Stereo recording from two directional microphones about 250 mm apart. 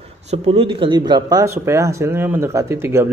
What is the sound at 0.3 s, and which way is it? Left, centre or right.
A man's voice, right.